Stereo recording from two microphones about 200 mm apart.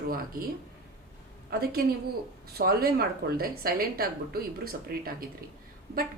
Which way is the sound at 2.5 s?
50° right (ahead or behind).